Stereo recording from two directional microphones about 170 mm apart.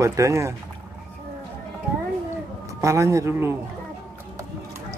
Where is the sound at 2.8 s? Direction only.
20° right (ahead or behind).